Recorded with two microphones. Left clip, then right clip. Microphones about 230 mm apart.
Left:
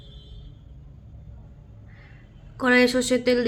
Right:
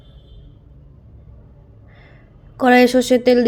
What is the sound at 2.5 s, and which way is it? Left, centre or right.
Speech, centre.